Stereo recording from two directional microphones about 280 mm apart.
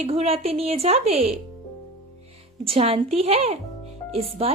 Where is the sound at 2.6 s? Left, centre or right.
Right.